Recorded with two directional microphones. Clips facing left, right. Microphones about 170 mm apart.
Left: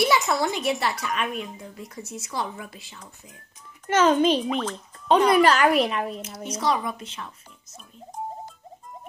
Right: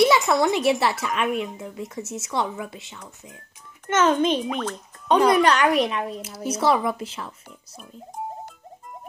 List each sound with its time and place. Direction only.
0.0 s a child's voice: 20° right (ahead or behind)
4.0 s a child's voice: 10° left (ahead or behind)
6.5 s a child's voice: 30° right (ahead or behind)